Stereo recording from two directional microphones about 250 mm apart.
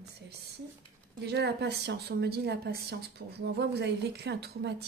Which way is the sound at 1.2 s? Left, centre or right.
Right.